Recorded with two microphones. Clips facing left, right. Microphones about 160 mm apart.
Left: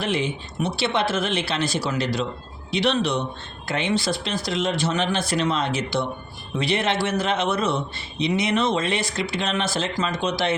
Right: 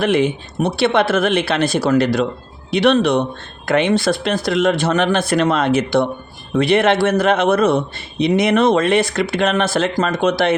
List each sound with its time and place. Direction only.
0.0 s a man's voice: 60° right (ahead or behind)